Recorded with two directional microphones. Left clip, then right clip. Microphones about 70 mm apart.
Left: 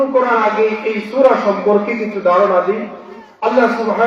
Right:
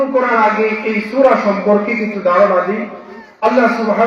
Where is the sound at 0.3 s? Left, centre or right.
Centre.